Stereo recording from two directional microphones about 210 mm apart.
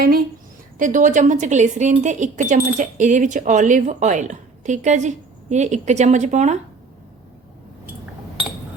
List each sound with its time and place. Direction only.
0.8 s speech: 40° right (ahead or behind)